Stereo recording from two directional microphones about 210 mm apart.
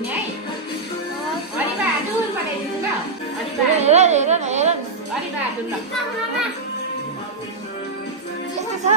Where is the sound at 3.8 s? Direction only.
30° right (ahead or behind).